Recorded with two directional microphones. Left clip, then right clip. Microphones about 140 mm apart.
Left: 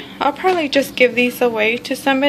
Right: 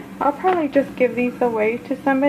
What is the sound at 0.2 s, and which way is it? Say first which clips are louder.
A woman's voice: left 2 dB; 25° left (ahead or behind).